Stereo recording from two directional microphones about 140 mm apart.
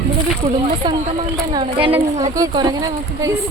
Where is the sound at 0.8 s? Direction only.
30° right (ahead or behind).